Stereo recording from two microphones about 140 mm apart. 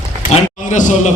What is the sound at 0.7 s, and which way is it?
Speech, 60° left (ahead or behind).